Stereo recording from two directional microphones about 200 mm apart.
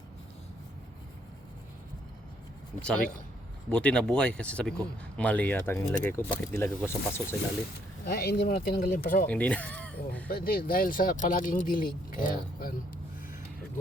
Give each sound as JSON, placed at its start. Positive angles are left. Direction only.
{"t": 3.7, "sound": "speech", "side_deg": 5}
{"t": 8.0, "sound": "speech", "side_deg": 50}
{"t": 9.2, "sound": "speech", "side_deg": 5}
{"t": 10.2, "sound": "speech", "side_deg": 45}